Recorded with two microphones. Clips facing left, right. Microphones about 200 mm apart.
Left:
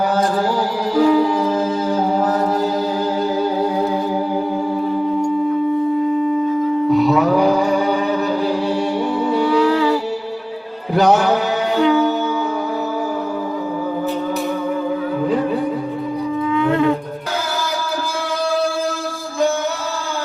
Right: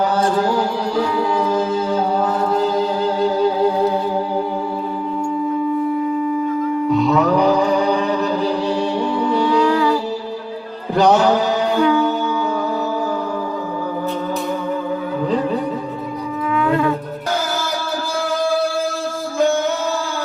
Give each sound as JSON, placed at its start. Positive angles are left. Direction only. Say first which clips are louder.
{"t": 6.9, "sound": "music", "louder": "left 1 dB", "side_deg": 5}
{"t": 11.8, "sound": "music", "louder": "left 2 dB", "side_deg": 20}
{"t": 16.5, "sound": "wind instrument", "louder": "left 1 dB", "side_deg": 25}